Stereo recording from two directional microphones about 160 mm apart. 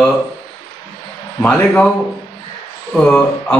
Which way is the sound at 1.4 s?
10° left (ahead or behind).